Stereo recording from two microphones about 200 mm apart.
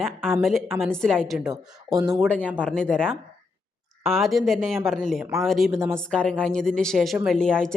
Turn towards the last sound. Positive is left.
turn(degrees=5)  # may be behind; listen again after turning